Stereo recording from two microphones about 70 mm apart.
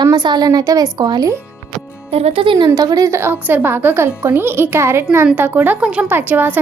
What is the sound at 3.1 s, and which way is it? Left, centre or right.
A woman's voice, right.